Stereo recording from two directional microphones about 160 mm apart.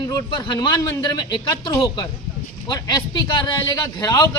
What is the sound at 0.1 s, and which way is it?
Speech, 25° left (ahead or behind).